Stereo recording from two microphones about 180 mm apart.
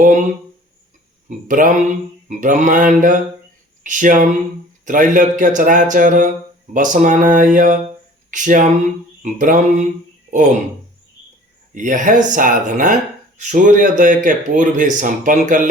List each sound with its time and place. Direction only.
0.0 s speech: 45° right (ahead or behind)
1.5 s speech: 50° right (ahead or behind)
11.7 s speech: 45° right (ahead or behind)